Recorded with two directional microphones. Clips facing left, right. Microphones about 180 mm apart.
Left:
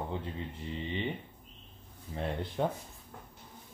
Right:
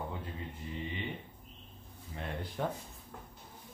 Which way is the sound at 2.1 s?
30° left (ahead or behind).